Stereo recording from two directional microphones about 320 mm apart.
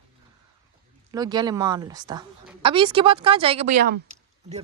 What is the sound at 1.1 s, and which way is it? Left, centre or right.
A woman's voice, centre.